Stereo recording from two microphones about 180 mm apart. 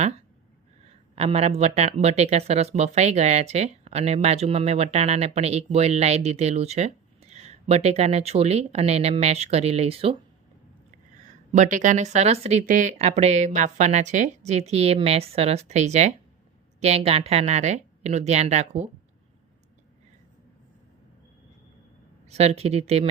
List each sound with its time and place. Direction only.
0.9 s speech: 35° right (ahead or behind)
11.2 s speech: 45° right (ahead or behind)
22.3 s speech: 35° right (ahead or behind)